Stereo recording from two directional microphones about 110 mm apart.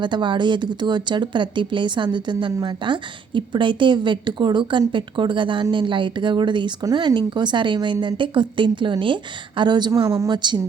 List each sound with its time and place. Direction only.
0.0 s speech: 45° right (ahead or behind)